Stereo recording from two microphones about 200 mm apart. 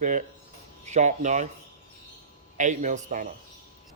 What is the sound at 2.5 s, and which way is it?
Speech, 40° right (ahead or behind).